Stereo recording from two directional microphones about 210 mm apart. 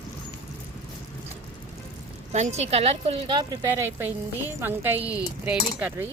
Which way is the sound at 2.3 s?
30° right (ahead or behind).